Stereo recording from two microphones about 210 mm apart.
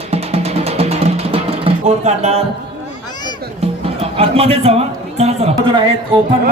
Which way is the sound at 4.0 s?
30° right (ahead or behind).